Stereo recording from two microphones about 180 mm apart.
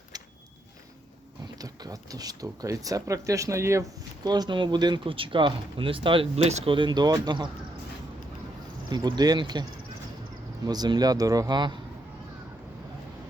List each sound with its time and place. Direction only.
0.1 s a sound: 20° right (ahead or behind)
1.5 s speech: 20° right (ahead or behind)
8.9 s speech: 25° right (ahead or behind)
10.7 s speech: 25° right (ahead or behind)